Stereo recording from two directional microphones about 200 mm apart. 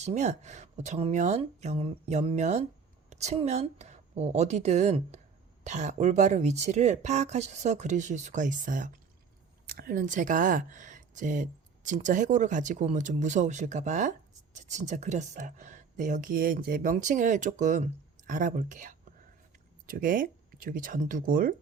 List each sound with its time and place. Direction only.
0.0 s speech: 35° right (ahead or behind)